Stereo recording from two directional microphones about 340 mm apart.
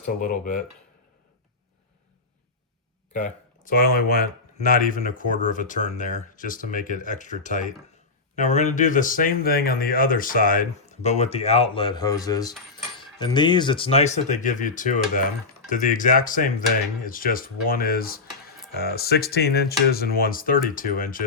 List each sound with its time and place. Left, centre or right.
0.0 s speech: left
3.1 s speech: left